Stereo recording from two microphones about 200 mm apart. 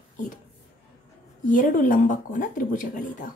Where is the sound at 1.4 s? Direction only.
40° left (ahead or behind).